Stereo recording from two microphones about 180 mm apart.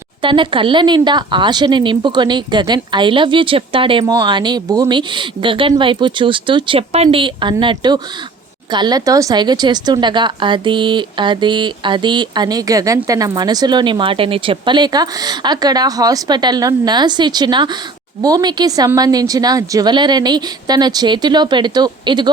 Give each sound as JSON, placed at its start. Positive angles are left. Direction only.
{"t": 0.2, "sound": "a woman's voice", "side_deg": -25}